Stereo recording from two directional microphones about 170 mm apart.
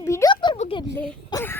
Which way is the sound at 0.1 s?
20° left (ahead or behind).